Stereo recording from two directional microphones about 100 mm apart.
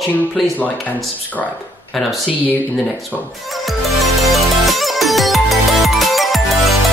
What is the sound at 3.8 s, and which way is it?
Music, centre (ahead or behind).